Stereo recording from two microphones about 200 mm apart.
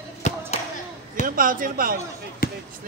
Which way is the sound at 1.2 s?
45° right (ahead or behind).